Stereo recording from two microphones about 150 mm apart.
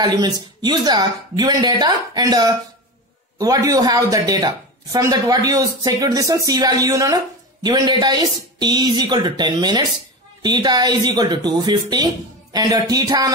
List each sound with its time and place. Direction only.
0.0 s speech: 30° right (ahead or behind)